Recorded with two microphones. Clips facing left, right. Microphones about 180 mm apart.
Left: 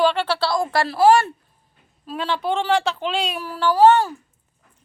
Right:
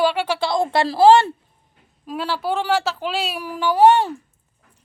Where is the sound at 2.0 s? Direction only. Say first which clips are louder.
Even; 5° right (ahead or behind).